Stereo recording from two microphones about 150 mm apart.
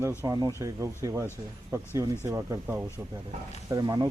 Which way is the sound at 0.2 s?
25° right (ahead or behind).